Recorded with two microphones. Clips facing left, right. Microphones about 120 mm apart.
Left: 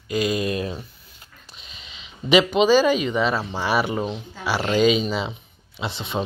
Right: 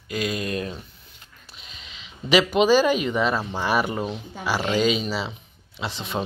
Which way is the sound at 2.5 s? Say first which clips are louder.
Left 1 dB; 10° right (ahead or behind).